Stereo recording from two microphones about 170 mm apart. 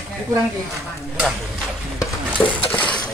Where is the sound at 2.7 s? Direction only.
5° left (ahead or behind).